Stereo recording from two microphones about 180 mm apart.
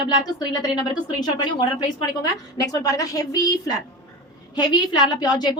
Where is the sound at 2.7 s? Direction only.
20° left (ahead or behind).